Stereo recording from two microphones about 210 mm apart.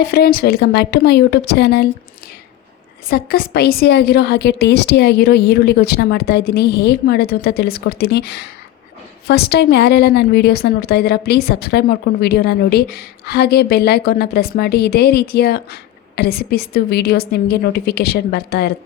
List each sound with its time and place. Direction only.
0.0 s a woman's voice: 45° left (ahead or behind)
3.1 s a woman's voice: 45° left (ahead or behind)